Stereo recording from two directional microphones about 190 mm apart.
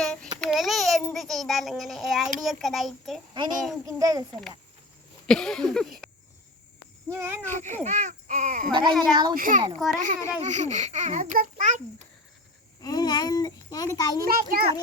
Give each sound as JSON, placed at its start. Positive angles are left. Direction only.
{"t": 0.0, "sound": "child singing", "side_deg": 5}
{"t": 0.3, "sound": "a child's voice", "side_deg": 0}
{"t": 2.4, "sound": "a sound", "side_deg": 0}
{"t": 3.3, "sound": "a child's voice", "side_deg": -25}
{"t": 5.2, "sound": "a sound", "side_deg": 5}
{"t": 7.1, "sound": "a child's voice", "side_deg": -10}
{"t": 7.5, "sound": "a child's voice", "side_deg": -40}
{"t": 8.9, "sound": "a sound", "side_deg": 0}
{"t": 9.3, "sound": "a child's voice", "side_deg": -45}
{"t": 12.8, "sound": "a child's voice", "side_deg": 20}
{"t": 14.3, "sound": "a child's voice", "side_deg": -50}